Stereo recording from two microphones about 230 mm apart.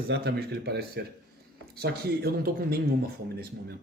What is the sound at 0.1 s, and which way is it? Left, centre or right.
Speech, right.